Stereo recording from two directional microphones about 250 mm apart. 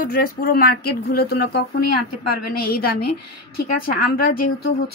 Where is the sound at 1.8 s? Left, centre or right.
Left.